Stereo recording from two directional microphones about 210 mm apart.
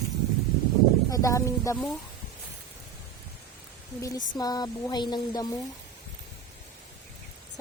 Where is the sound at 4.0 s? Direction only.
15° left (ahead or behind).